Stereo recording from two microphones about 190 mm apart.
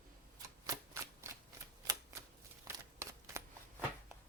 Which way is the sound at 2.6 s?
15° right (ahead or behind).